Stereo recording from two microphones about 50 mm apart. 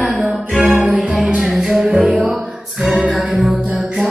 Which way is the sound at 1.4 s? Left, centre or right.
Centre.